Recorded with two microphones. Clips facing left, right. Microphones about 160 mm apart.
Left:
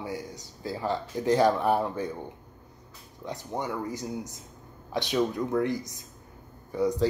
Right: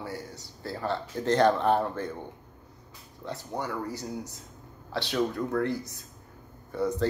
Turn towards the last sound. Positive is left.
turn(degrees=15)  # may be behind; listen again after turning